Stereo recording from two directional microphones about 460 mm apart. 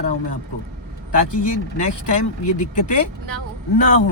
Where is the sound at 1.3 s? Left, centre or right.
Left.